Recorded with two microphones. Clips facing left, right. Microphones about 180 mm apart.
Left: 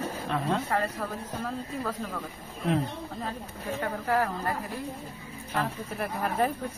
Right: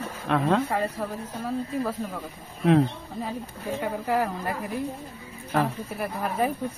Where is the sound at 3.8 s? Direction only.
15° right (ahead or behind).